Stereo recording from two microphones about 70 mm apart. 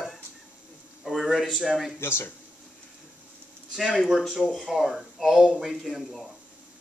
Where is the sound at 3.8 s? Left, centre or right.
Centre.